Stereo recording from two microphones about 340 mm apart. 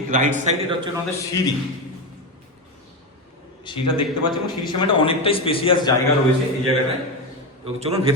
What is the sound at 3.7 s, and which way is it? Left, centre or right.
Speech, centre.